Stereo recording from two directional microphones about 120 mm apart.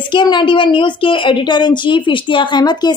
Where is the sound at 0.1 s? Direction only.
40° left (ahead or behind).